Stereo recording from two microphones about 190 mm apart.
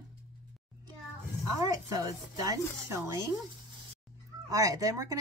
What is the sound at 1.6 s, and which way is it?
Speech, 20° right (ahead or behind).